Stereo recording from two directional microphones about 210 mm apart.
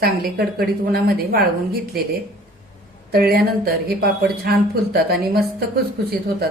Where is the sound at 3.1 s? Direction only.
45° right (ahead or behind).